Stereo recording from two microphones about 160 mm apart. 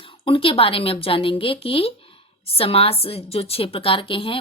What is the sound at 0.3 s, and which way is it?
A woman's voice, 35° left (ahead or behind).